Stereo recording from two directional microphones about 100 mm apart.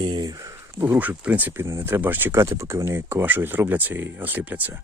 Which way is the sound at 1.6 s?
30° right (ahead or behind).